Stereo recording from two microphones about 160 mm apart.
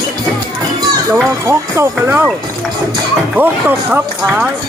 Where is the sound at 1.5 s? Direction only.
15° right (ahead or behind).